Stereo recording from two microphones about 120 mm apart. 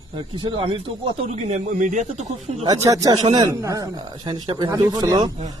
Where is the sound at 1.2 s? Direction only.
65° right (ahead or behind).